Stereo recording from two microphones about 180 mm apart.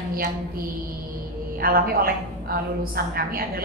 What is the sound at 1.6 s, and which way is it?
A woman's voice, 55° right (ahead or behind).